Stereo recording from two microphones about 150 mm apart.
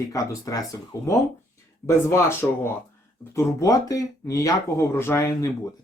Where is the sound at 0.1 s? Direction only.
20° left (ahead or behind).